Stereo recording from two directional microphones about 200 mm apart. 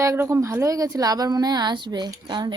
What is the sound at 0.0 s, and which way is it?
Speech, 15° right (ahead or behind).